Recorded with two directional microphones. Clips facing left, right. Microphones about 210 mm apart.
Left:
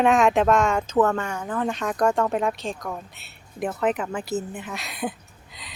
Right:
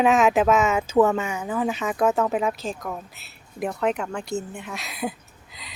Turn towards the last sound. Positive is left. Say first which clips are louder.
# even
turn(degrees=0)  # may be behind; listen again after turning